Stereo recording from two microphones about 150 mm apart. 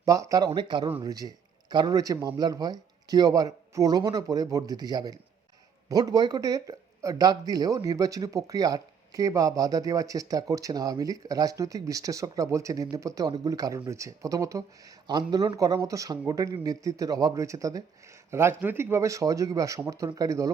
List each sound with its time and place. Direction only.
0.0 s speech: 20° right (ahead or behind)